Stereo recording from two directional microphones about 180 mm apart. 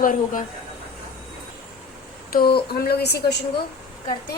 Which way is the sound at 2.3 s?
60° left (ahead or behind).